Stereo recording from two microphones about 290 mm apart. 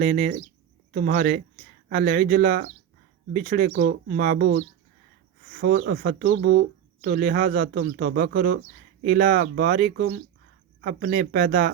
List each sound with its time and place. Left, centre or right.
0.0 s speech: right